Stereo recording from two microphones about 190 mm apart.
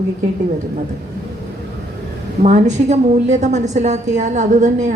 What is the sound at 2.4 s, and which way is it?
A woman's voice, 40° right (ahead or behind).